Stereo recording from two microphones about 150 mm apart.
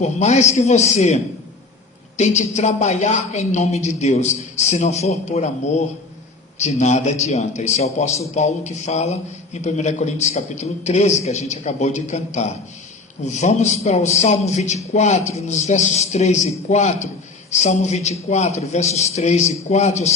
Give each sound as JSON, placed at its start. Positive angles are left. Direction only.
{"t": 0.0, "sound": "a man's voice", "side_deg": 50}